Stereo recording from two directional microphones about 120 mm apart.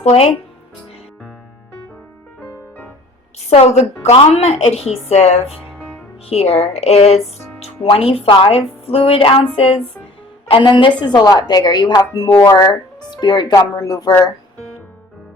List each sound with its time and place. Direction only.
0.0 s speech: 65° left (ahead or behind)
3.5 s speech: 65° left (ahead or behind)
7.9 s a woman's voice: 50° left (ahead or behind); by 14.1 s 30° left (ahead or behind)